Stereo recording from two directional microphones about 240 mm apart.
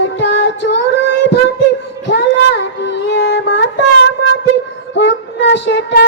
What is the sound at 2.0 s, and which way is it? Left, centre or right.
Music, left.